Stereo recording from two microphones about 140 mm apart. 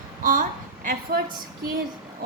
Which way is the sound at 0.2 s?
65° right (ahead or behind).